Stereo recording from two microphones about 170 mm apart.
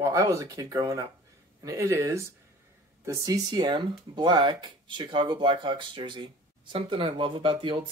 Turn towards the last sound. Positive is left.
turn(degrees=-30)  # may be behind; listen again after turning